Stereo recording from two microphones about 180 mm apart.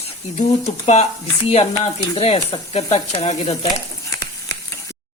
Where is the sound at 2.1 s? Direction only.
35° left (ahead or behind).